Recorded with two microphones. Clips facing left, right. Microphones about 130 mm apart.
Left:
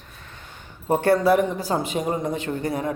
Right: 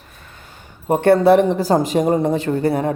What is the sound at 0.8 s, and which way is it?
Speech, 20° right (ahead or behind).